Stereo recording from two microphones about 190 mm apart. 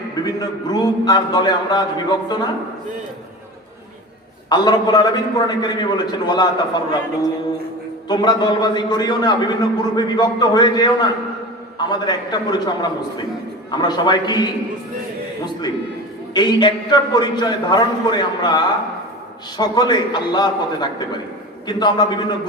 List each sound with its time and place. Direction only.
0.3 s a man's voice: 20° left (ahead or behind)
4.4 s a man's voice: 20° left (ahead or behind)
8.0 s a man's voice: 20° left (ahead or behind)
16.3 s a man's voice: 20° left (ahead or behind)